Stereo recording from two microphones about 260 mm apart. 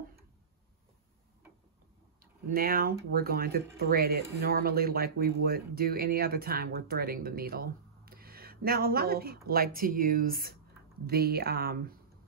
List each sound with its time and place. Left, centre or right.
2.5 s speech: right